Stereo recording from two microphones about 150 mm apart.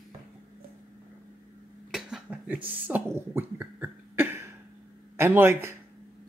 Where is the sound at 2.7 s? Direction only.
10° right (ahead or behind).